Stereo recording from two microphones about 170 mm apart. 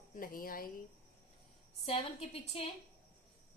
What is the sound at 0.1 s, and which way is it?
Speech, 55° left (ahead or behind).